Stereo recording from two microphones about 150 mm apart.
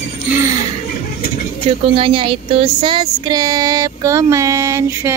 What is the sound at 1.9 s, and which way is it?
Speech, 35° right (ahead or behind).